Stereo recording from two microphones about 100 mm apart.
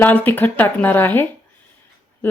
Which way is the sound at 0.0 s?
20° left (ahead or behind).